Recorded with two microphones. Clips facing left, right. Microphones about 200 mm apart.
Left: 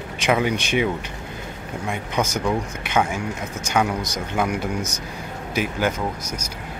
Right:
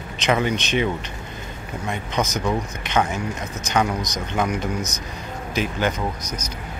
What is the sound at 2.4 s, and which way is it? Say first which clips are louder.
Speech: even; 10° left (ahead or behind).